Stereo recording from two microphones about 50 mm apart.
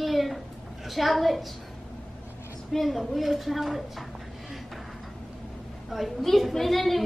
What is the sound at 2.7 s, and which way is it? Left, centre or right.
A child's voice, centre.